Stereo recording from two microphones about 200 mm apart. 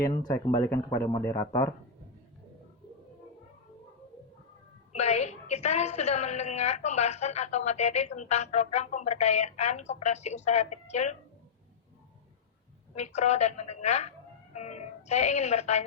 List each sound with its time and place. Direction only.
0.3 s speech: 15° left (ahead or behind)
4.9 s a woman's voice: 35° left (ahead or behind)
12.9 s speech: 35° left (ahead or behind)